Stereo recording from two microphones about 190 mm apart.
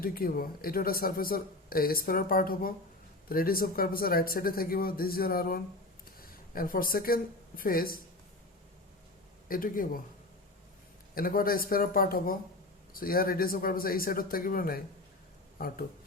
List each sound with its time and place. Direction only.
0.0 s speech: 50° left (ahead or behind)
9.5 s speech: 50° left (ahead or behind)
11.1 s speech: 50° left (ahead or behind)